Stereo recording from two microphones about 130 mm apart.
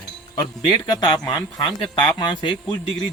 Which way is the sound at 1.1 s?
35° left (ahead or behind).